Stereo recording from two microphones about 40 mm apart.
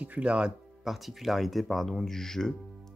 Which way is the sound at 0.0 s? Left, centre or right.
Right.